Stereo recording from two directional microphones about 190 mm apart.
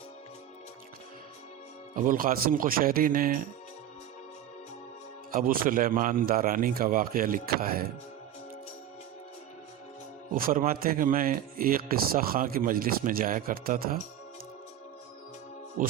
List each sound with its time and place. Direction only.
2.0 s speech: 50° right (ahead or behind)
5.3 s speech: 50° right (ahead or behind)
10.3 s speech: 50° right (ahead or behind)
15.8 s speech: 45° right (ahead or behind)